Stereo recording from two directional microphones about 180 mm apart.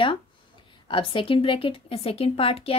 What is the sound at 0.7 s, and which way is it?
A woman's voice, 30° left (ahead or behind).